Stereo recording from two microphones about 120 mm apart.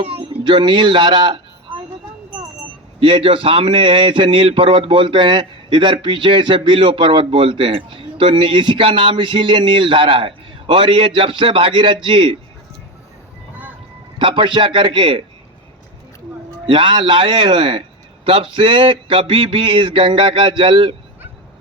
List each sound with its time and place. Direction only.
0.0 s speech: 55° right (ahead or behind)
0.4 s a man's voice: 40° right (ahead or behind)
3.0 s a man's voice: 45° right (ahead or behind)
14.2 s a man's voice: 40° right (ahead or behind)
16.6 s a man's voice: 45° right (ahead or behind)